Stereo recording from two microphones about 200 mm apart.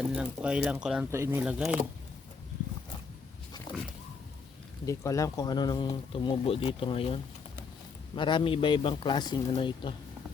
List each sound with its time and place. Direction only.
0.1 s speech: 5° right (ahead or behind)
4.9 s speech: 15° left (ahead or behind)